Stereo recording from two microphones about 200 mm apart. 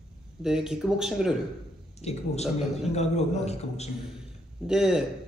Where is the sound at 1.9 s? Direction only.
30° left (ahead or behind).